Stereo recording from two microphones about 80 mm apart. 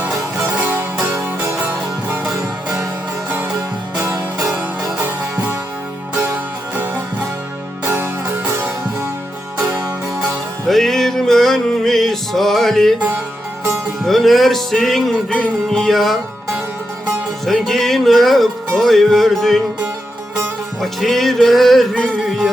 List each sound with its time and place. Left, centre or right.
0.3 s music: right
2.3 s music: right
4.0 s music: right
4.4 s music: right
10.7 s music: centre
14.1 s music: centre
17.4 s music: centre
20.8 s music: centre
21.9 s music: centre